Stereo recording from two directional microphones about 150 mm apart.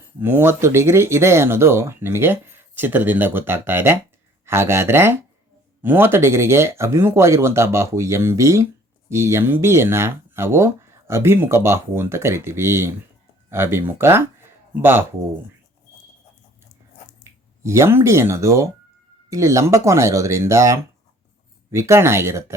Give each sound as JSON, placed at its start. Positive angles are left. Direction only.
{"t": 0.2, "sound": "speech", "side_deg": -15}
{"t": 17.6, "sound": "speech", "side_deg": -20}